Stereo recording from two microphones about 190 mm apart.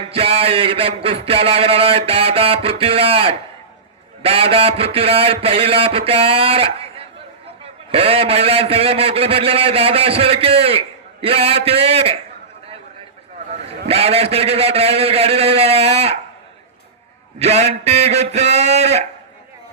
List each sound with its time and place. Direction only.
0.1 s a man's voice: 30° right (ahead or behind)
13.5 s a man's voice: 30° right (ahead or behind)
17.4 s a man's voice: 35° right (ahead or behind)